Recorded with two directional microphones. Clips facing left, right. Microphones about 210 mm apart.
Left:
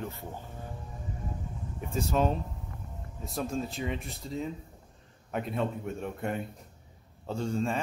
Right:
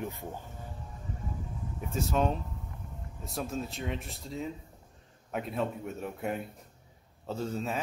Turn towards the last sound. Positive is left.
turn(degrees=-5)  # may be behind; listen again after turning